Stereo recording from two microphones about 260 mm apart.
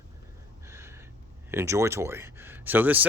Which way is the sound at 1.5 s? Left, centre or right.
Centre.